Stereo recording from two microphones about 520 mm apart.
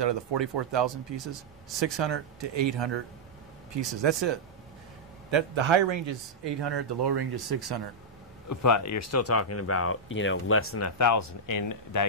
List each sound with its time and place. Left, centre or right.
0.0 s speech: right
8.5 s speech: left